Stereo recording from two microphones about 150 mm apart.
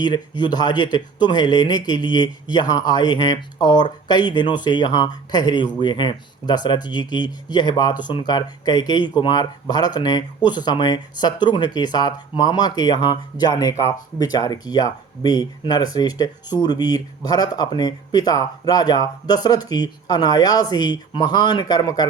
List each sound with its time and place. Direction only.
0.0 s speech: 30° left (ahead or behind)